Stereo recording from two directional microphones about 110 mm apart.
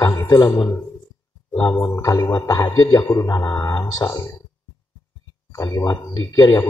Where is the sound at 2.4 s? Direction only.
30° left (ahead or behind).